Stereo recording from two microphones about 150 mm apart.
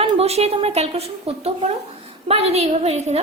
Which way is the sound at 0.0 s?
45° right (ahead or behind).